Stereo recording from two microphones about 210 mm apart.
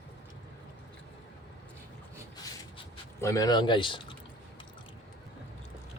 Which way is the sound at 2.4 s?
15° left (ahead or behind).